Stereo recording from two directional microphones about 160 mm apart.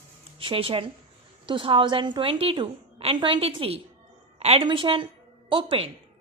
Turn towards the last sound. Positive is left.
turn(degrees=-35)  # may be behind; listen again after turning